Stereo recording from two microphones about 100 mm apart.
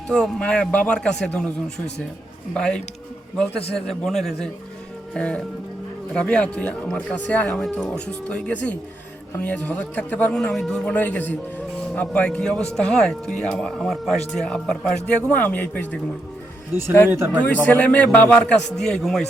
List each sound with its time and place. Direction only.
0.1 s a man's voice: 10° left (ahead or behind)
17.1 s speech: 20° right (ahead or behind)
17.7 s a man's voice: 15° left (ahead or behind)